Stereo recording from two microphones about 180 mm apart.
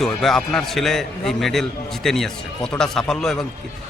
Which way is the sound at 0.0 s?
Centre (ahead or behind).